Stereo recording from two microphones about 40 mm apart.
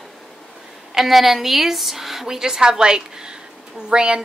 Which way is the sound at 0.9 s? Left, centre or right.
Centre.